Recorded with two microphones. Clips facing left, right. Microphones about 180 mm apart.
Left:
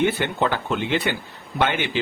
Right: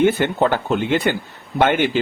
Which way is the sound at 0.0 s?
45° right (ahead or behind).